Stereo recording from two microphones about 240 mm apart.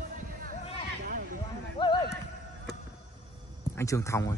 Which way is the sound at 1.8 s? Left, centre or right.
Centre.